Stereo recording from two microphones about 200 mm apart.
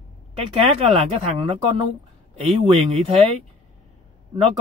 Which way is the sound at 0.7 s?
30° right (ahead or behind).